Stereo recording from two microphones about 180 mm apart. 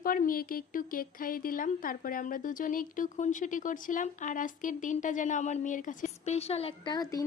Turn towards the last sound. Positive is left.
turn(degrees=20)  # may be behind; listen again after turning